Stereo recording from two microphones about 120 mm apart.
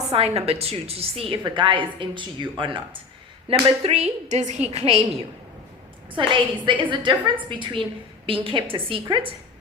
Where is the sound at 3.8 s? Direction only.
65° right (ahead or behind).